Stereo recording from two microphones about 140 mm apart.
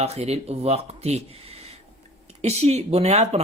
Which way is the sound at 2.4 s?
50° right (ahead or behind).